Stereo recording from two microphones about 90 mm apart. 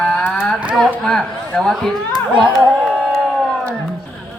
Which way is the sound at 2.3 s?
15° right (ahead or behind).